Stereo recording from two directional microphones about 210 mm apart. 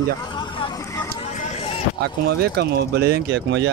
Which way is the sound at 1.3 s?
30° left (ahead or behind).